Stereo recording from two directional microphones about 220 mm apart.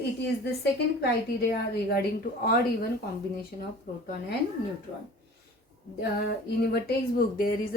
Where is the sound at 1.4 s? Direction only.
45° left (ahead or behind).